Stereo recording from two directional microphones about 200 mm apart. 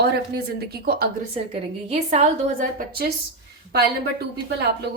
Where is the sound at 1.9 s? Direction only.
30° right (ahead or behind).